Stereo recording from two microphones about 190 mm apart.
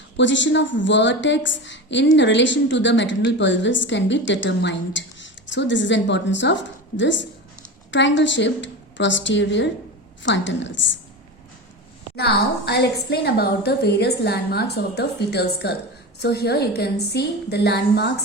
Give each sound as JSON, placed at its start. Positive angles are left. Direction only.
{"t": 0.2, "sound": "a woman's voice", "side_deg": 75}
{"t": 12.1, "sound": "a woman's voice", "side_deg": 60}